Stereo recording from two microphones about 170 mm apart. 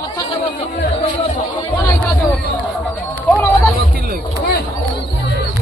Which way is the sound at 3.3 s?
5° left (ahead or behind).